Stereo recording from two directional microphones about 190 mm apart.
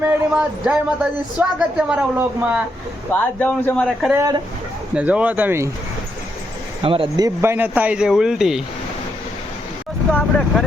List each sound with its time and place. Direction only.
0.0 s a woman's voice: 5° right (ahead or behind)
3.1 s speech: 10° left (ahead or behind)
3.8 s a woman's voice: 5° right (ahead or behind)
6.8 s speech: 30° right (ahead or behind)
7.3 s speech: 10° right (ahead or behind)
10.1 s vehicle: 5° left (ahead or behind)